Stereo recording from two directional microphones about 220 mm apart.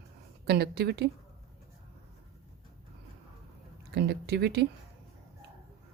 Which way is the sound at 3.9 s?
50° right (ahead or behind).